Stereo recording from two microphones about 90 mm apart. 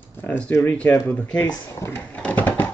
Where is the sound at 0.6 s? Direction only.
15° left (ahead or behind).